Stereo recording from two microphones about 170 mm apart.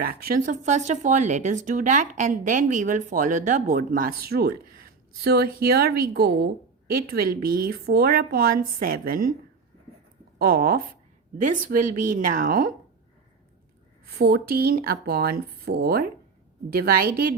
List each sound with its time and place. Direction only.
0.0 s a woman's voice: 65° right (ahead or behind)
10.3 s speech: 65° right (ahead or behind)
11.3 s speech: 50° right (ahead or behind)
14.2 s a woman's voice: 65° right (ahead or behind)